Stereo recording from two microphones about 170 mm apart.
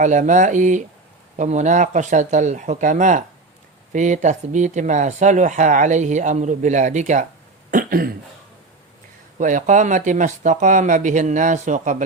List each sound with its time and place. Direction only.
0.0 s speech: 45° right (ahead or behind)
7.7 s speech: 55° right (ahead or behind)
9.4 s speech: 45° right (ahead or behind)